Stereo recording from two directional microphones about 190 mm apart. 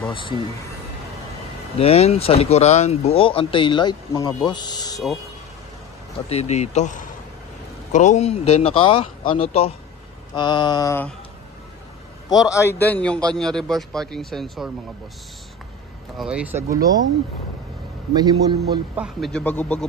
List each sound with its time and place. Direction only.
0.1 s speech: 25° left (ahead or behind)
1.8 s speech: 30° left (ahead or behind)
6.2 s speech: 35° left (ahead or behind); by 11.1 s 15° left (ahead or behind)
12.3 s a man's voice: 20° left (ahead or behind); by 14.7 s centre (ahead or behind)
16.2 s a man's voice: 5° right (ahead or behind)
16.7 s a man's voice: 20° right (ahead or behind)
18.1 s a man's voice: 20° right (ahead or behind)
18.9 s a man's voice: centre (ahead or behind)